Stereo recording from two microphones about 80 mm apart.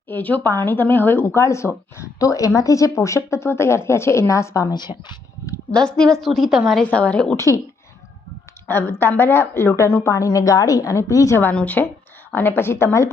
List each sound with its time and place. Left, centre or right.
0.1 s speech: left
2.1 s a woman's voice: left
4.7 s a woman's voice: left
5.7 s a woman's voice: centre
6.8 s a woman's voice: centre
7.3 s a woman's voice: left
8.6 s a woman's voice: left
11.5 s a woman's voice: centre; by 13.1 s left